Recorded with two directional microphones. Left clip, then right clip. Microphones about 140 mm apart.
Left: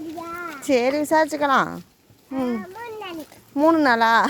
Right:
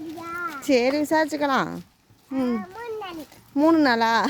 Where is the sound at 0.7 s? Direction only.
30° right (ahead or behind).